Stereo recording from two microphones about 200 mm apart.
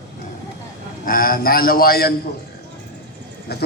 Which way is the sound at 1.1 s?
45° left (ahead or behind).